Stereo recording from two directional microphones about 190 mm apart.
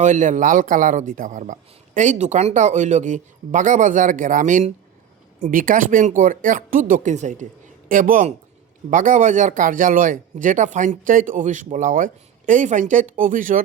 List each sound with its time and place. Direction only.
0.0 s speech: 40° right (ahead or behind)